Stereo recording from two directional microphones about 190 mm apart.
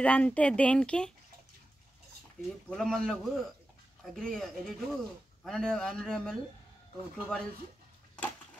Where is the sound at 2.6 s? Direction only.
Centre (ahead or behind).